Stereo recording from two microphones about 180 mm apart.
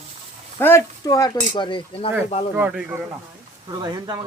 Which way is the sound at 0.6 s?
15° left (ahead or behind).